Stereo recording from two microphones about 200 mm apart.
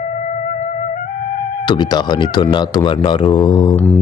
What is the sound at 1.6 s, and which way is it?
Speech, 20° left (ahead or behind).